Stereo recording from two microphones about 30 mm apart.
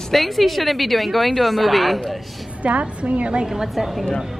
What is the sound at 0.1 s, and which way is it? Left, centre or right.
A woman's voice, centre.